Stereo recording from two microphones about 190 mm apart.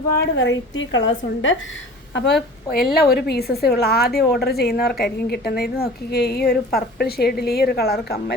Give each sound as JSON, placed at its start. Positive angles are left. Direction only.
{"t": 0.2, "sound": "a woman's voice", "side_deg": 70}
{"t": 2.1, "sound": "a woman's voice", "side_deg": 65}